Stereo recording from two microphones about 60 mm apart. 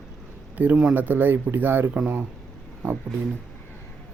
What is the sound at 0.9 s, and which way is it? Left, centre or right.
Speech, right.